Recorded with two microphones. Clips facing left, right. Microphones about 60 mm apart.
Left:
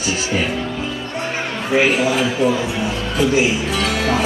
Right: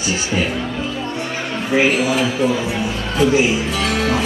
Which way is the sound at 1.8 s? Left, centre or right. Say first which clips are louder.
Even; centre.